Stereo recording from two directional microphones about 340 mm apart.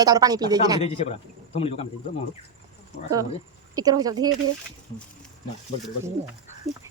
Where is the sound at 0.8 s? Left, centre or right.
Centre.